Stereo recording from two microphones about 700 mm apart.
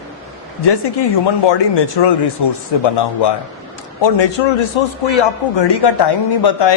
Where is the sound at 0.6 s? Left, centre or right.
Left.